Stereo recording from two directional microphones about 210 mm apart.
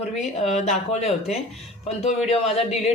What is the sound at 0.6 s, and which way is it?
Speech, 35° left (ahead or behind).